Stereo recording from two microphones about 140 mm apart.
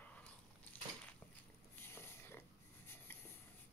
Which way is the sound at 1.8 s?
15° left (ahead or behind).